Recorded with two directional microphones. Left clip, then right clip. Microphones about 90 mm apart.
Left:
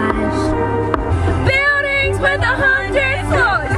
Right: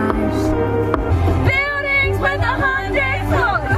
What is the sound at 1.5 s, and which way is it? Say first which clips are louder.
Music: left 4 dB; 25° left (ahead or behind).